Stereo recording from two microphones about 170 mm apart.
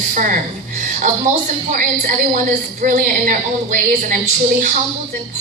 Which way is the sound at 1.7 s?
50° right (ahead or behind).